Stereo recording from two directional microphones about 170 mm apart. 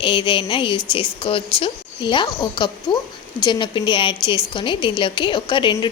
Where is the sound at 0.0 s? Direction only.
30° left (ahead or behind).